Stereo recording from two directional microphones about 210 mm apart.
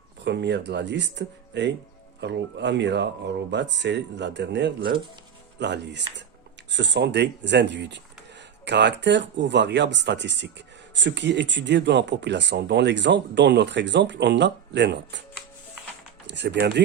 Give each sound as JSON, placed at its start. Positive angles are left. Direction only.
{"t": 0.3, "sound": "speech", "side_deg": -55}
{"t": 16.2, "sound": "speech", "side_deg": -55}